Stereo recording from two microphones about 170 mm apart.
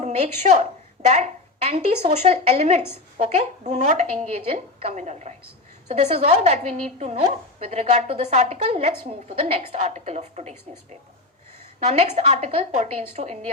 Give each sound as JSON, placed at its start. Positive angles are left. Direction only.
{"t": 0.0, "sound": "a woman's voice", "side_deg": -45}
{"t": 11.8, "sound": "a woman's voice", "side_deg": -40}